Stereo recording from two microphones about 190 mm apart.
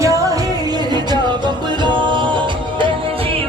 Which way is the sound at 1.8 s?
25° right (ahead or behind).